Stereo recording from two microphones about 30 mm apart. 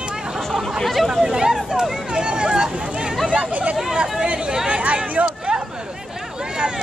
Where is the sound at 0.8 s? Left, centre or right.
Centre.